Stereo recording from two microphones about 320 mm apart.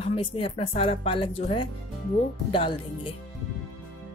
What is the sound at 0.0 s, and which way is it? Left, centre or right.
Speech, centre.